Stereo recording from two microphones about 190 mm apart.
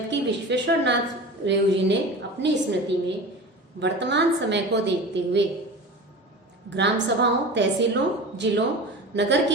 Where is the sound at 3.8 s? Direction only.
65° right (ahead or behind).